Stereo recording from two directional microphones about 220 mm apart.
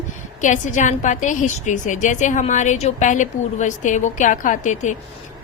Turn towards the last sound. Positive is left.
turn(degrees=35)  # may be behind; listen again after turning